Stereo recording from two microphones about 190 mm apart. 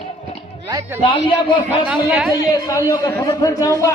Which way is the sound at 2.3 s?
20° left (ahead or behind).